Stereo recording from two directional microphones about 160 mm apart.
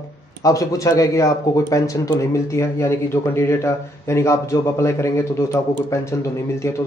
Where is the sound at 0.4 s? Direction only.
20° left (ahead or behind).